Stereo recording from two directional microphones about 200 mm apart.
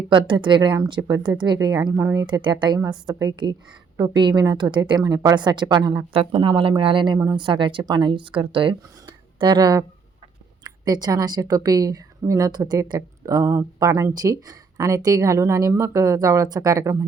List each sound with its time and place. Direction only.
0.1 s a woman's voice: 25° right (ahead or behind)